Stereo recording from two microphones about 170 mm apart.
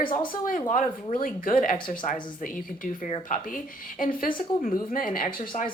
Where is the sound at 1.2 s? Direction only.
50° left (ahead or behind).